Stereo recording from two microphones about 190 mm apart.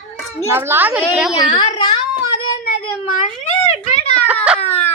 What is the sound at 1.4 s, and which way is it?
Speech, 25° left (ahead or behind).